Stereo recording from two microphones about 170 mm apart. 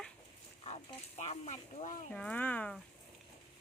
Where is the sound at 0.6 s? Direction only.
40° left (ahead or behind).